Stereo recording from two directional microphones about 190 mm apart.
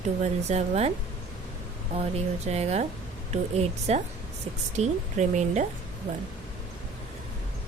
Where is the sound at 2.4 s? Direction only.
35° right (ahead or behind).